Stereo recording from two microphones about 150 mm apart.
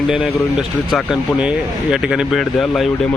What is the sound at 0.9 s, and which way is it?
Speech, 5° right (ahead or behind).